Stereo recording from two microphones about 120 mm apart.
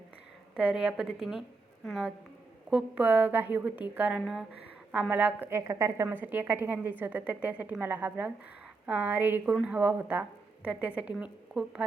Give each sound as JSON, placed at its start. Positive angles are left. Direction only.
{"t": 0.5, "sound": "a woman's voice", "side_deg": -10}
{"t": 2.6, "sound": "a woman's voice", "side_deg": -10}